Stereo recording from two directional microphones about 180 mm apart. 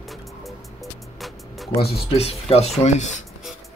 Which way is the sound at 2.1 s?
35° left (ahead or behind).